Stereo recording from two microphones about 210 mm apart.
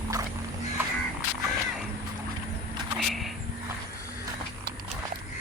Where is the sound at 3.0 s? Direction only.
Centre (ahead or behind).